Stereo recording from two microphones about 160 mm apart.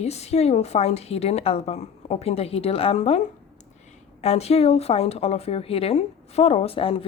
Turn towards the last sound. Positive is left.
turn(degrees=35)  # may be behind; listen again after turning